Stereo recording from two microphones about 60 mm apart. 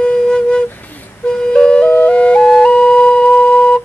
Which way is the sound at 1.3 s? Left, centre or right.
Centre.